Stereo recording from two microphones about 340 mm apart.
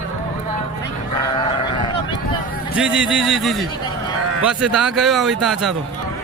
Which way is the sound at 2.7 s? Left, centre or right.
Centre.